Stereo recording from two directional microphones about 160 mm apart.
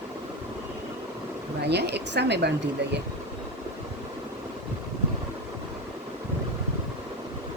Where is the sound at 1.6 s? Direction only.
90° right.